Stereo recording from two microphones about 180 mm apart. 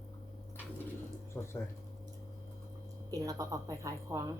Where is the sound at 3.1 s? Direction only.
20° right (ahead or behind).